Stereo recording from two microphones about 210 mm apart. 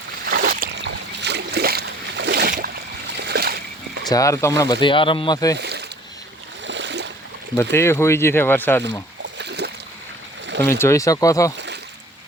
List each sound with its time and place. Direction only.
0.3 s boat: 45° right (ahead or behind)
3.2 s splash: 50° right (ahead or behind)
4.1 s speech: 15° left (ahead or behind)
5.5 s boat: 55° right (ahead or behind)
6.7 s splash: 60° right (ahead or behind)
7.5 s speech: 10° left (ahead or behind)
9.4 s splash: 55° right (ahead or behind)
10.6 s speech: 10° left (ahead or behind)
11.5 s a sound: 55° right (ahead or behind)